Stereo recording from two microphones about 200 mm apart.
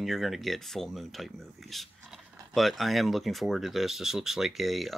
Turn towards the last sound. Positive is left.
turn(degrees=0)  # may be behind; listen again after turning